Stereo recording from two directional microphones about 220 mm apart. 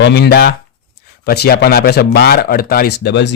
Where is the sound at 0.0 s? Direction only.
50° left (ahead or behind).